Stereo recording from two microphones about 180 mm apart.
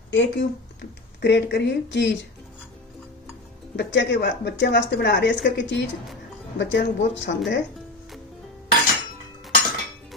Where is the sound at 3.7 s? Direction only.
75° left (ahead or behind).